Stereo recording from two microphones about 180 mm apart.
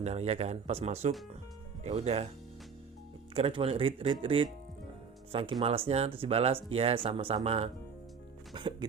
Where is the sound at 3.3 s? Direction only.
30° right (ahead or behind).